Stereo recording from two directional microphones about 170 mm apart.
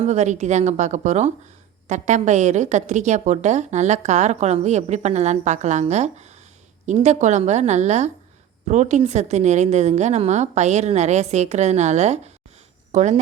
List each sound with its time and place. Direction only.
0.0 s a woman's voice: 40° right (ahead or behind)